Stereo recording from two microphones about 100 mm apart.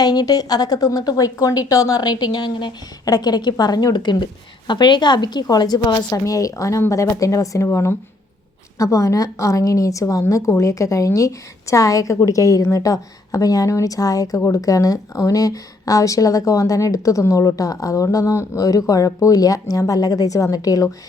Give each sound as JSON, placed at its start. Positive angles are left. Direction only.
{"t": 0.0, "sound": "a woman's voice", "side_deg": 40}